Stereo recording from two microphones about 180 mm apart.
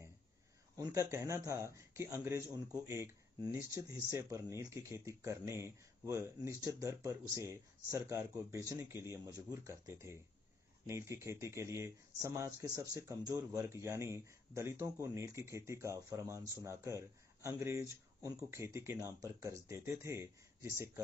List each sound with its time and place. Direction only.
0.7 s speech: 15° right (ahead or behind)